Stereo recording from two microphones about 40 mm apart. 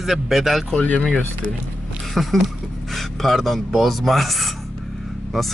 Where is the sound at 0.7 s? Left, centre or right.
Left.